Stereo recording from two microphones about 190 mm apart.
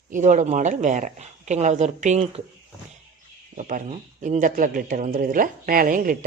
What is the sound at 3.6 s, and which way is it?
Speech, 40° right (ahead or behind).